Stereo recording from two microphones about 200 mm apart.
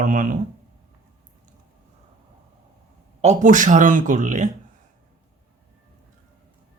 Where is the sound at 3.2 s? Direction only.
35° right (ahead or behind).